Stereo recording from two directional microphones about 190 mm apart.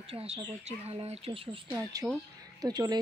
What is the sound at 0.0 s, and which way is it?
Speech, 30° right (ahead or behind).